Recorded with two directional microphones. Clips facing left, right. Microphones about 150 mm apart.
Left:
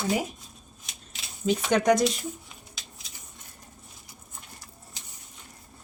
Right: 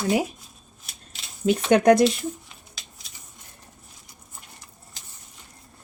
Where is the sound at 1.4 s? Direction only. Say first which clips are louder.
Right 5 dB; 60° right (ahead or behind).